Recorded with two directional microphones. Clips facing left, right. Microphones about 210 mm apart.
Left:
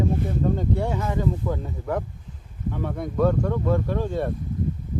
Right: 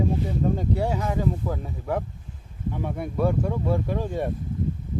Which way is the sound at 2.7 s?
15° right (ahead or behind).